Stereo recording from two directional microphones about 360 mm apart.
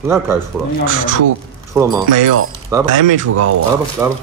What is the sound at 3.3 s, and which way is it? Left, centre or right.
Speech, right.